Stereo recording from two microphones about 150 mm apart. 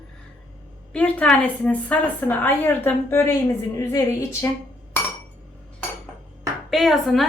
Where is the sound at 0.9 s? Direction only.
10° left (ahead or behind).